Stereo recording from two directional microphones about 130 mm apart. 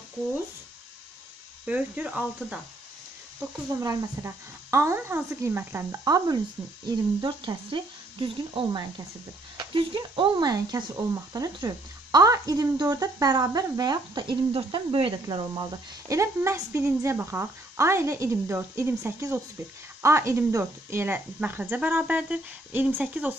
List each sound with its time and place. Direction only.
1.7 s speech: 10° right (ahead or behind)
3.8 s speech: 20° right (ahead or behind)